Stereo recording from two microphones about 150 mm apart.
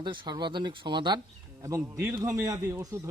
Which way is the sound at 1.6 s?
20° right (ahead or behind).